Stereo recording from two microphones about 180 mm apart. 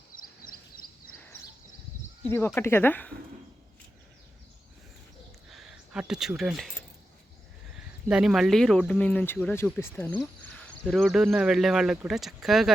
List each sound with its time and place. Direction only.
0.2 s a sound: 55° left (ahead or behind)
2.2 s speech: 10° left (ahead or behind)
5.5 s speech: 5° right (ahead or behind)
8.0 s speech: 5° right (ahead or behind)